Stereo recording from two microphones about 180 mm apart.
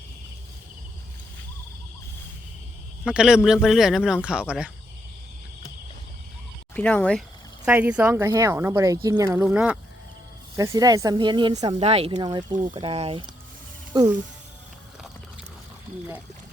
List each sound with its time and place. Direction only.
3.0 s speech: 5° right (ahead or behind)
6.7 s speech: 5° left (ahead or behind)
7.6 s speech: 10° right (ahead or behind)
10.6 s speech: 20° right (ahead or behind)
11.9 s speech: 35° right (ahead or behind)